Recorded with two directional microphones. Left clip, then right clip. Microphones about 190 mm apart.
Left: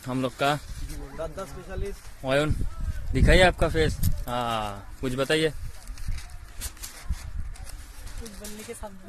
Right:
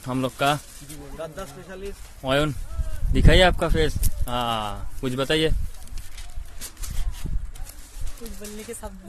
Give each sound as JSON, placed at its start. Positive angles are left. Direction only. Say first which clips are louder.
{"t": 0.0, "sound": "speech", "louder": "right 3 dB", "side_deg": 0}
{"t": 8.4, "sound": "speech", "louder": "right 3 dB", "side_deg": -55}